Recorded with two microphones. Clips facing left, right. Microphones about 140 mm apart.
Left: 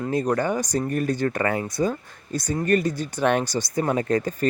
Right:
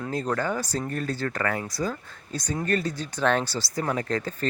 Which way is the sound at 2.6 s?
10° left (ahead or behind).